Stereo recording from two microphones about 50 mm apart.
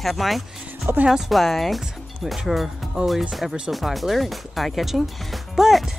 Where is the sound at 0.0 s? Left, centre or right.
Centre.